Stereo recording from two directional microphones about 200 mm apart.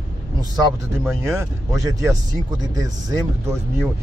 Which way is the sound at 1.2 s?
15° right (ahead or behind).